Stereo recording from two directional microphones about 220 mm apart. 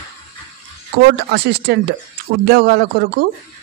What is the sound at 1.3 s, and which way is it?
A man's voice, 50° right (ahead or behind).